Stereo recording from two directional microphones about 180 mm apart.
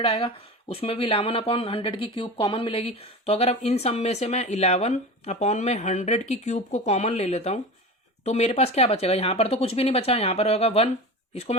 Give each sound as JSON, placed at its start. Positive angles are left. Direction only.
{"t": 0.0, "sound": "speech", "side_deg": 30}